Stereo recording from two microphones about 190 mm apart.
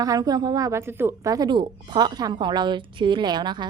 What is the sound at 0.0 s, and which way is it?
A woman's voice, 20° right (ahead or behind).